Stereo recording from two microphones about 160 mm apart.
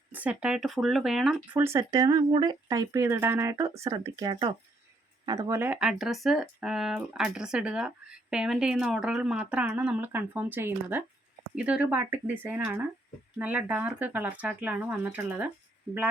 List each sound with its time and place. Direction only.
0.1 s speech: 10° right (ahead or behind)
1.6 s speech: 20° right (ahead or behind)